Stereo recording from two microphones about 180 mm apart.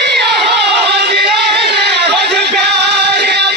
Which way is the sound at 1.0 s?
65° right (ahead or behind).